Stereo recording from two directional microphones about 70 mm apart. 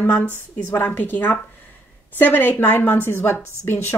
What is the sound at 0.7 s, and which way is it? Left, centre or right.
A woman's voice, left.